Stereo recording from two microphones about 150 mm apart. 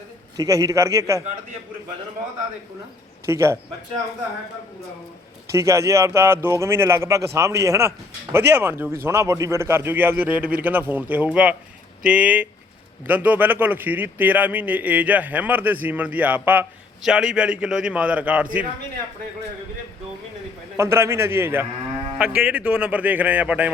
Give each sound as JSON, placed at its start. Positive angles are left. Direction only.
{"t": 0.3, "sound": "speech", "side_deg": -25}
{"t": 3.2, "sound": "a man's voice", "side_deg": -15}
{"t": 5.5, "sound": "a man's voice", "side_deg": -20}
{"t": 20.7, "sound": "a man's voice", "side_deg": -15}